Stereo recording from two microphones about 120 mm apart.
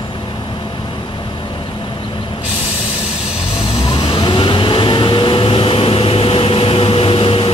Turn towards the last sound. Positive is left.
turn(degrees=50)  # may be behind; listen again after turning